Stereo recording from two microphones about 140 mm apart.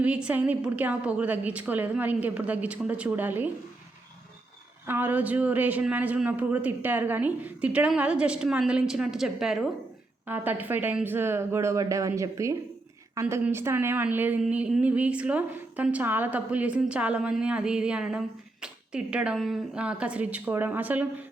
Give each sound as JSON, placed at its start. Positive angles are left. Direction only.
{"t": 0.0, "sound": "a woman's voice", "side_deg": -10}
{"t": 4.9, "sound": "a woman's voice", "side_deg": -15}